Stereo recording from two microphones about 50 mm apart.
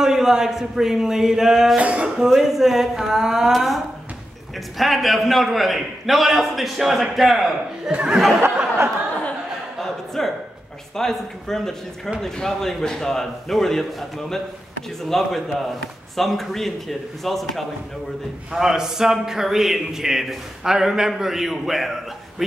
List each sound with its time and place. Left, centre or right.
0.0 s a man's voice: centre
1.8 s speech: right
2.1 s a man's voice: centre
3.5 s a man's voice: centre
7.8 s speech: centre
9.8 s a sound: centre
11.0 s a man's voice: centre
18.5 s a man's voice: centre